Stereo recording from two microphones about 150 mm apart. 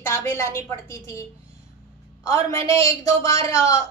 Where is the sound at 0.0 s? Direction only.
15° left (ahead or behind).